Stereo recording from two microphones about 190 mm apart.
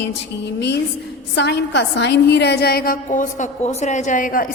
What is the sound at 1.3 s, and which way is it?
A woman's voice, 65° left (ahead or behind).